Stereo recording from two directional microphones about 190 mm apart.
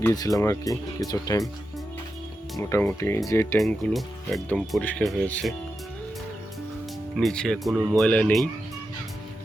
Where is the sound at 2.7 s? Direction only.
10° left (ahead or behind).